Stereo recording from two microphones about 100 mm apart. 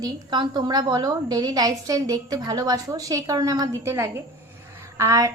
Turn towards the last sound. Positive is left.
turn(degrees=-30)  # may be behind; listen again after turning